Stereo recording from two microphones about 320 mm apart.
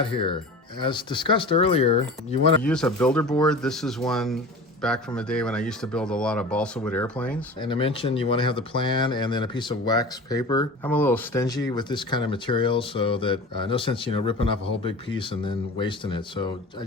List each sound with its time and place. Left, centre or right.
0.0 s speech: centre
2.6 s speech: centre
7.6 s speech: centre